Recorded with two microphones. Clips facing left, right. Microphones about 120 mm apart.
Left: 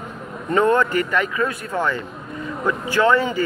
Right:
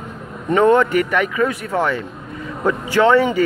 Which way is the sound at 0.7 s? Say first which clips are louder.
Right 3 dB; 70° right (ahead or behind).